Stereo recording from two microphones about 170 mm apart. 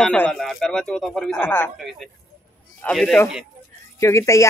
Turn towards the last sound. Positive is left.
turn(degrees=15)  # may be behind; listen again after turning